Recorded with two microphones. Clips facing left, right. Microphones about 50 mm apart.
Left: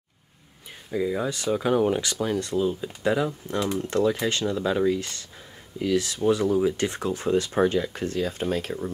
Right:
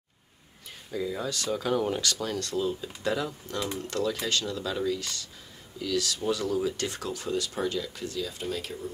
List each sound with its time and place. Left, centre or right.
0.9 s speech: left